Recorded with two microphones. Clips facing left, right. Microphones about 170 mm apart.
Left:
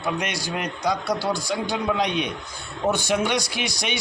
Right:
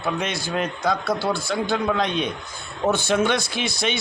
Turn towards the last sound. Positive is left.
turn(degrees=15)  # may be behind; listen again after turning